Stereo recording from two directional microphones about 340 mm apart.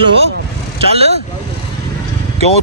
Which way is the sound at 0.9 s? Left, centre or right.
Centre.